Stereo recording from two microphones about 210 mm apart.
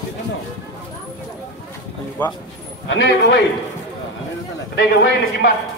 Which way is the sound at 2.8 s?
55° left (ahead or behind).